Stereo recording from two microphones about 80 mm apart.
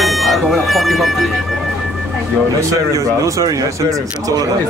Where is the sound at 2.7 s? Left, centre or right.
Right.